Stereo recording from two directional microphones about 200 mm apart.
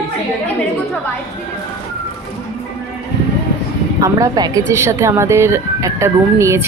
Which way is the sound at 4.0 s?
20° right (ahead or behind).